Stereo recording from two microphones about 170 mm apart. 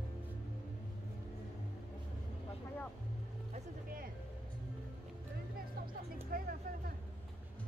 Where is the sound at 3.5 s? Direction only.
55° right (ahead or behind).